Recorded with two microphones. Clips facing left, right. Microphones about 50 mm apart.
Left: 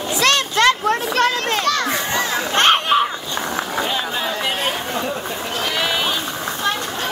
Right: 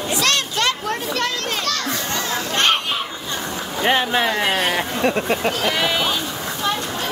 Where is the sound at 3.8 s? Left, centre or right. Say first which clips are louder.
Right 8 dB; right.